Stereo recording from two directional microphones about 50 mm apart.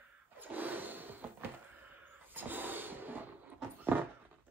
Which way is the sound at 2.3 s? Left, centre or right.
Right.